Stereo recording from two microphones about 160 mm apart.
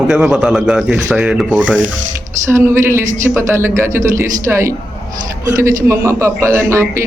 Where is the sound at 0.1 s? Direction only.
5° right (ahead or behind).